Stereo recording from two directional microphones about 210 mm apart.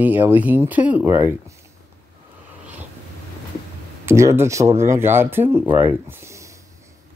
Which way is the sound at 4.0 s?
15° right (ahead or behind).